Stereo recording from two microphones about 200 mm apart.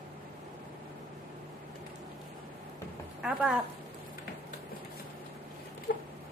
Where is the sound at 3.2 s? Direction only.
5° right (ahead or behind).